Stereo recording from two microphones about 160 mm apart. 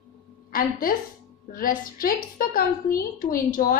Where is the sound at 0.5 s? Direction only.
60° left (ahead or behind).